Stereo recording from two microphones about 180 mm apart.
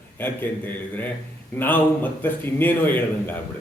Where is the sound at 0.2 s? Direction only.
10° left (ahead or behind).